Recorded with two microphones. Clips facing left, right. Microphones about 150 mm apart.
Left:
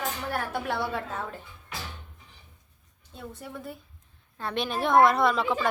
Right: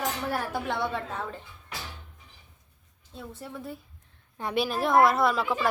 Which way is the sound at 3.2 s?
Centre (ahead or behind).